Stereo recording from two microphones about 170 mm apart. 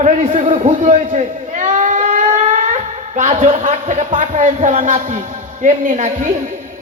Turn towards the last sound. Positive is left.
turn(degrees=-50)  # may be behind; listen again after turning